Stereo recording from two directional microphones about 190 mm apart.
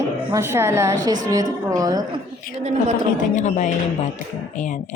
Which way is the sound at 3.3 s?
40° left (ahead or behind).